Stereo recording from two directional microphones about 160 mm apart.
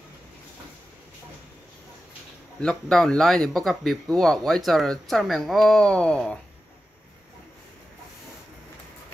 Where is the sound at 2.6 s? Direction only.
5° left (ahead or behind).